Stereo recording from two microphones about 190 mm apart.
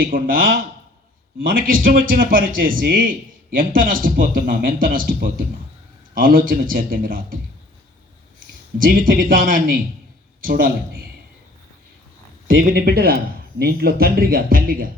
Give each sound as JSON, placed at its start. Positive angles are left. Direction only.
{"t": 0.0, "sound": "a man's voice", "side_deg": -50}
{"t": 8.8, "sound": "a man's voice", "side_deg": -45}
{"t": 12.7, "sound": "a man's voice", "side_deg": -55}